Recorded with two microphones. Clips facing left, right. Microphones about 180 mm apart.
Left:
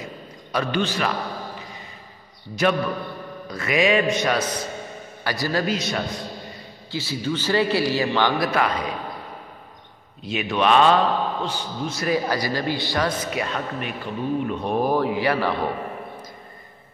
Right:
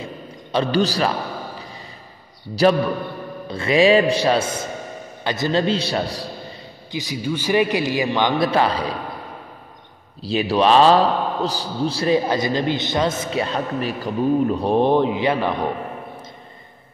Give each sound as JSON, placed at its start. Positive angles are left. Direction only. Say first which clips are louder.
{"t": 0.0, "sound": "a sound", "louder": "right 3 dB", "side_deg": -30}
{"t": 2.5, "sound": "a man's voice", "louder": "right 5 dB", "side_deg": -35}
{"t": 6.9, "sound": "a man's voice", "louder": "right 1 dB", "side_deg": -15}
{"t": 10.2, "sound": "a man's voice", "louder": "right 4 dB", "side_deg": -35}